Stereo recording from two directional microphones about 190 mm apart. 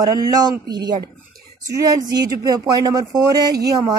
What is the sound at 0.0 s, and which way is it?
A woman's voice, 20° right (ahead or behind).